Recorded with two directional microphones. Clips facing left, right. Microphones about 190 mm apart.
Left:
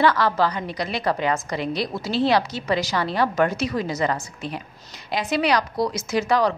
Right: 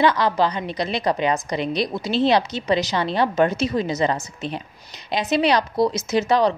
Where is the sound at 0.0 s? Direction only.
20° right (ahead or behind).